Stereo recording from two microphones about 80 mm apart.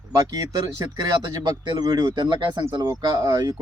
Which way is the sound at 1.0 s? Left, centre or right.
Right.